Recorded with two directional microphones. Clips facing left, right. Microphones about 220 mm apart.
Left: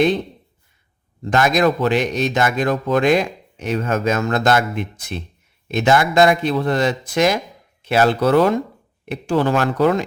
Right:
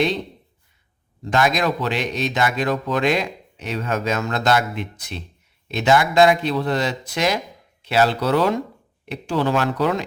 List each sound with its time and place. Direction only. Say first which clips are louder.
1.3 s speech: left 4 dB; 50° left (ahead or behind)